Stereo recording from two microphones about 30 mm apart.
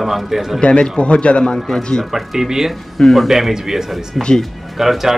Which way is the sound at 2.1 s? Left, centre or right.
Centre.